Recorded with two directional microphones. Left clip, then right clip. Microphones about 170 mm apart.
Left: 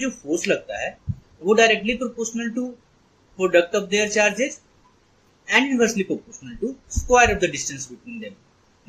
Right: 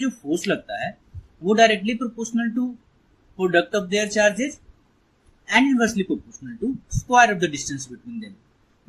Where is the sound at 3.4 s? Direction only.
45° right (ahead or behind).